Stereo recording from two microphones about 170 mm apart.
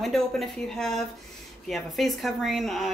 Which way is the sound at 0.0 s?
Centre (ahead or behind).